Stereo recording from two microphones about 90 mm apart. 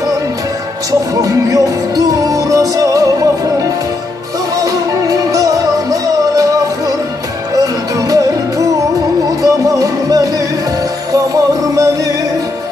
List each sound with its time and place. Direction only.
1.2 s music: 40° right (ahead or behind)